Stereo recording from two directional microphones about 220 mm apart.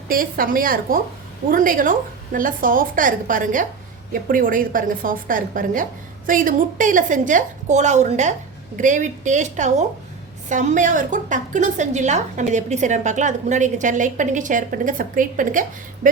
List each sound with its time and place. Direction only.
0.1 s a woman's voice: 40° right (ahead or behind)